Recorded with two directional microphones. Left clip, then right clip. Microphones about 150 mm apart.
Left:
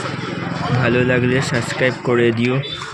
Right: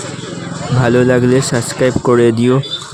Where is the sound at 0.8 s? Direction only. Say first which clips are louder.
Right 6 dB; 55° right (ahead or behind).